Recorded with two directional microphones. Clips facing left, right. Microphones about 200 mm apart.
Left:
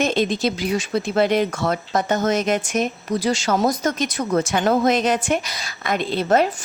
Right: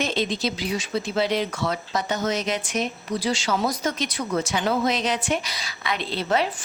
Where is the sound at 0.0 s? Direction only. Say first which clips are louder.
Left 5 dB; 50° left (ahead or behind).